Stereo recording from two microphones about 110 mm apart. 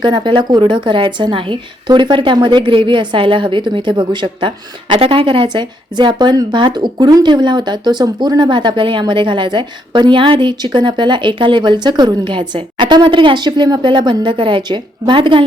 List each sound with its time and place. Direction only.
0.0 s a woman's voice: 45° right (ahead or behind)